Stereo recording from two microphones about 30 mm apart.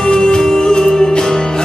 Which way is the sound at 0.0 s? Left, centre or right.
Left.